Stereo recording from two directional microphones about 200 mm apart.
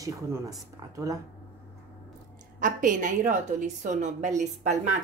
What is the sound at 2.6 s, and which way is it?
A woman's voice, 40° right (ahead or behind).